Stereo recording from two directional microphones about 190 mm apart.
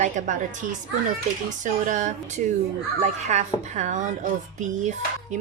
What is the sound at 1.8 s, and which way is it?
Speech, 40° right (ahead or behind).